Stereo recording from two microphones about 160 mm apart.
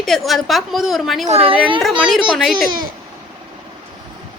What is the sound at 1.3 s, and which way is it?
Speech, 40° right (ahead or behind).